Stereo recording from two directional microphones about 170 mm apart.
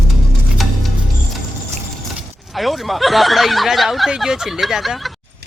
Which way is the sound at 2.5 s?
Centre (ahead or behind).